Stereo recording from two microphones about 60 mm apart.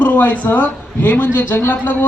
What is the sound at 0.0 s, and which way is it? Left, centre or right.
Speech, left.